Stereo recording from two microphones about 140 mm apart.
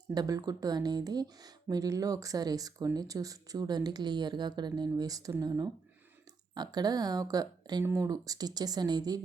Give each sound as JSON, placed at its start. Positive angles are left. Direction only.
{"t": 0.1, "sound": "speech", "side_deg": -25}